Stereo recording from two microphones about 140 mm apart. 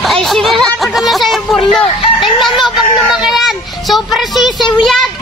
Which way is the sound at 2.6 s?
Centre (ahead or behind).